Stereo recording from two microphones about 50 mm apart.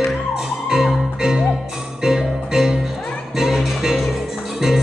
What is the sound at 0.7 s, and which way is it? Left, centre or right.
Music, centre.